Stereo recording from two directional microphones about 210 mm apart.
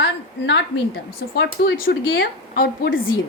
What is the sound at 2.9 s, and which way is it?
Speech, 70° left (ahead or behind).